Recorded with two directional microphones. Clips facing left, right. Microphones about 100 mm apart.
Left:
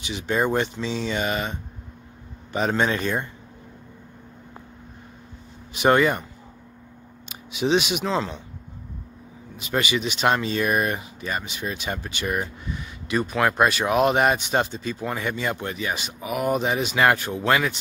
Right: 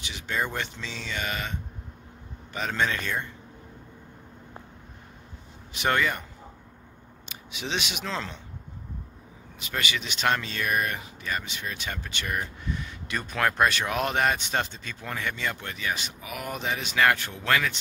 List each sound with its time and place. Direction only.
0.0 s speech: 20° left (ahead or behind)
5.8 s speech: 20° left (ahead or behind)
7.5 s speech: 15° left (ahead or behind)
9.6 s speech: 20° left (ahead or behind)